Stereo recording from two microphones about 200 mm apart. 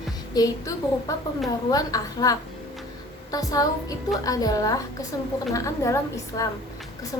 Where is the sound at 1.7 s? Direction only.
15° left (ahead or behind).